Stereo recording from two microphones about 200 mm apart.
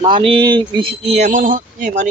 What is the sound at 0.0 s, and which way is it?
Speech, 25° right (ahead or behind).